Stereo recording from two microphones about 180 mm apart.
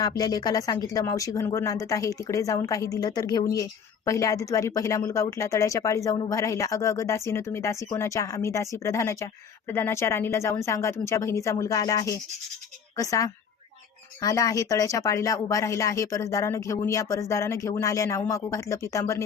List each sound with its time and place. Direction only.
0.2 s a woman's voice: 20° left (ahead or behind)